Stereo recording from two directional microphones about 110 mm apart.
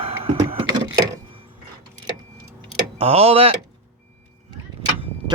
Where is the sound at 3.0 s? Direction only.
65° right (ahead or behind).